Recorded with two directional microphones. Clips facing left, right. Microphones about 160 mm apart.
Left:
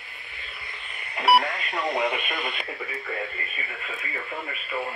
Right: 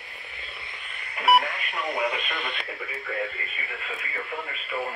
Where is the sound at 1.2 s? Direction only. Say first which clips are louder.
Left 1 dB; 35° left (ahead or behind).